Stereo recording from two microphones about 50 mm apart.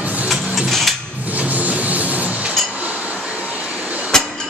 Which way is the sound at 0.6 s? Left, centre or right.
Centre.